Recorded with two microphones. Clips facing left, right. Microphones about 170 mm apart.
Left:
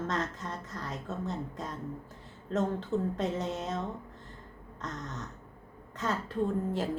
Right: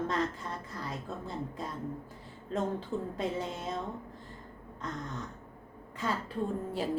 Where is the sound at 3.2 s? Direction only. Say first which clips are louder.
Left 2 dB; 10° right (ahead or behind).